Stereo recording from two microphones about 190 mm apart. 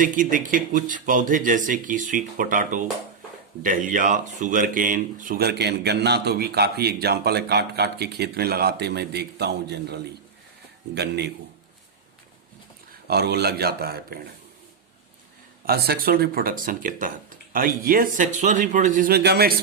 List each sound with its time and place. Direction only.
0.0 s speech: 45° right (ahead or behind); by 11.3 s 60° right (ahead or behind)
13.1 s speech: 60° right (ahead or behind)
15.6 s speech: 55° right (ahead or behind)